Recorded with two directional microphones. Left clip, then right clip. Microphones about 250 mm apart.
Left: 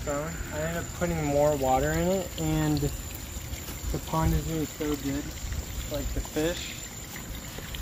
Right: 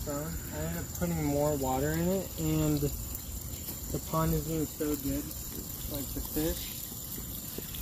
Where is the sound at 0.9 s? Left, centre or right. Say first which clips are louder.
Left 5 dB; centre.